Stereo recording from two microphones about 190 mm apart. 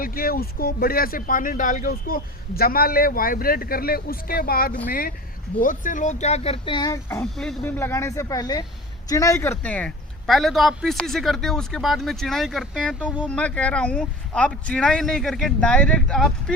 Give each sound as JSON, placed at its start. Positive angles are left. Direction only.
{"t": 0.0, "sound": "a man's voice", "side_deg": 50}